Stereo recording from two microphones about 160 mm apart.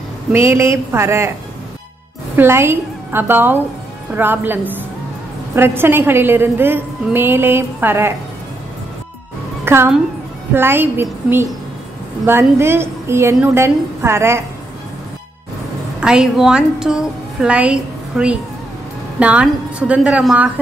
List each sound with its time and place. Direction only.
0.3 s a woman's voice: 15° right (ahead or behind)
2.3 s a woman's voice: 15° right (ahead or behind)
9.7 s a woman's voice: 15° right (ahead or behind)
16.0 s a woman's voice: 5° right (ahead or behind)